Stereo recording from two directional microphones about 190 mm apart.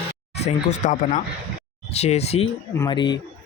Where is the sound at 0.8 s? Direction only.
40° left (ahead or behind); by 3.2 s 25° left (ahead or behind).